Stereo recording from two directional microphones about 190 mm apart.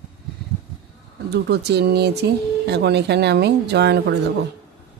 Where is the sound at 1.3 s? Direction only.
60° right (ahead or behind).